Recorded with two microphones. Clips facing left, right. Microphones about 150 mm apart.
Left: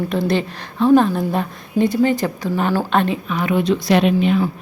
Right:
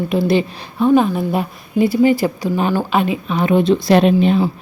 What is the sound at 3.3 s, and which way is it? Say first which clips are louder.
Speech: right 4 dB; 30° right (ahead or behind).